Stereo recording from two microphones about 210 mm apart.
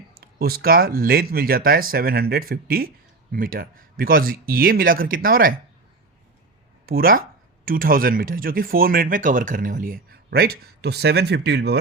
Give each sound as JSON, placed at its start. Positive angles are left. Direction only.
{"t": 0.3, "sound": "speech", "side_deg": -45}
{"t": 6.8, "sound": "speech", "side_deg": -45}